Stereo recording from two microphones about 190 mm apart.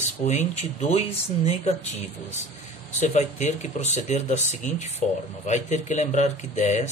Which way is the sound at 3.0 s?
40° left (ahead or behind).